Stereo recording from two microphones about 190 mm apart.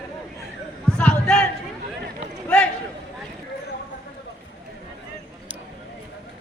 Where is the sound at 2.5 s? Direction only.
5° left (ahead or behind).